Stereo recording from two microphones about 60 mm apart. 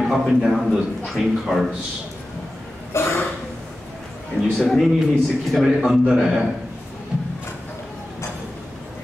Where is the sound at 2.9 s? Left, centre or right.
Left.